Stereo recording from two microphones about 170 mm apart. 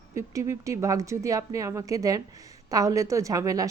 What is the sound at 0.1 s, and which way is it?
A woman's voice, 15° right (ahead or behind).